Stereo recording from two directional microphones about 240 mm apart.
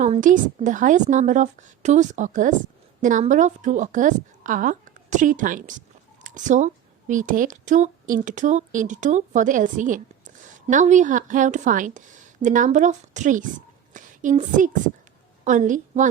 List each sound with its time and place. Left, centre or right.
0.0 s a woman's voice: right